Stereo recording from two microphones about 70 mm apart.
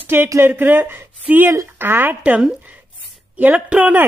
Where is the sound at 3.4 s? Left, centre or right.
Centre.